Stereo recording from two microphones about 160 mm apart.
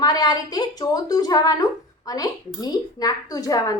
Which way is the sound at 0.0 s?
25° left (ahead or behind).